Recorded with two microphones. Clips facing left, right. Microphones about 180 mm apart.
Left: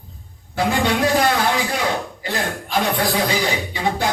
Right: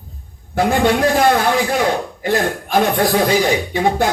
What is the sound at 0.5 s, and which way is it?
A man's voice, 50° right (ahead or behind).